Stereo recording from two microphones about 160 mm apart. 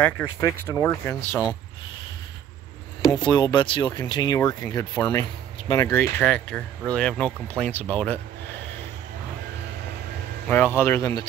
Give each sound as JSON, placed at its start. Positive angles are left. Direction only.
{"t": 0.0, "sound": "speech", "side_deg": 15}
{"t": 3.1, "sound": "speech", "side_deg": 25}
{"t": 10.8, "sound": "speech", "side_deg": 15}